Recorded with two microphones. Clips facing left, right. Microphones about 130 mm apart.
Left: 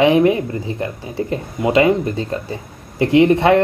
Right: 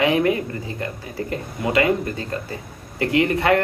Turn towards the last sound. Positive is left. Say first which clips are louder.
# left 6 dB
turn(degrees=25)  # may be behind; listen again after turning